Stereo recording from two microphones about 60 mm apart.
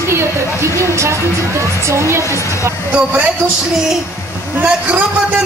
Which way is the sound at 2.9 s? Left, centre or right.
Right.